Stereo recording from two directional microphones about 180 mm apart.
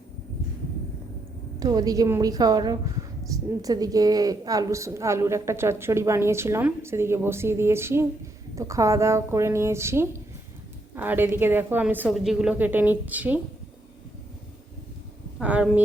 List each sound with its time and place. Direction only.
1.5 s a woman's voice: 20° right (ahead or behind)
15.4 s a woman's voice: 5° right (ahead or behind)